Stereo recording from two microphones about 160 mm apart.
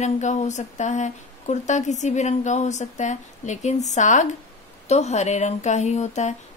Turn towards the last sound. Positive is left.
turn(degrees=45)  # may be behind; listen again after turning